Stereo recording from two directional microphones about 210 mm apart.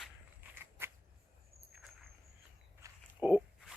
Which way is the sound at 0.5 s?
10° right (ahead or behind).